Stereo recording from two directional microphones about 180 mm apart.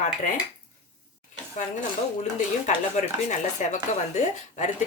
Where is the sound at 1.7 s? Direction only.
40° left (ahead or behind).